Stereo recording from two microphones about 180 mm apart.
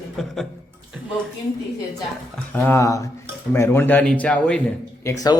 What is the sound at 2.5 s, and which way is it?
Speech, 10° left (ahead or behind).